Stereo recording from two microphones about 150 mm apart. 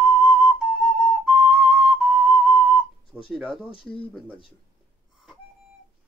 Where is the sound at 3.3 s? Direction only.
Centre (ahead or behind).